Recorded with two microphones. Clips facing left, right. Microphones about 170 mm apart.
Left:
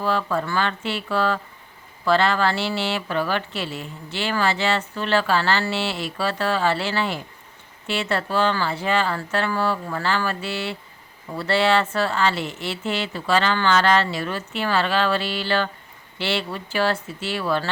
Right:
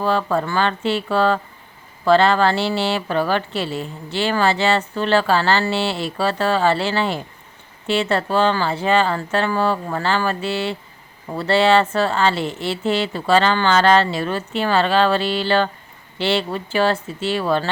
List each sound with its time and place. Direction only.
0.0 s a woman's voice: 30° right (ahead or behind)
0.3 s a woman's voice: 45° right (ahead or behind)
0.5 s a woman's voice: 30° right (ahead or behind)